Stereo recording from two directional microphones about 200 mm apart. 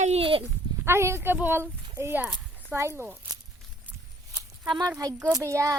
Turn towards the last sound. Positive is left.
turn(degrees=-15)  # may be behind; listen again after turning